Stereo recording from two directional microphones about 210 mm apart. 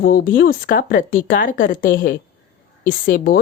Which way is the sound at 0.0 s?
45° left (ahead or behind).